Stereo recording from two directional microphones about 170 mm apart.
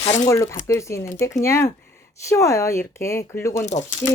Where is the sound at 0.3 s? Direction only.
15° left (ahead or behind).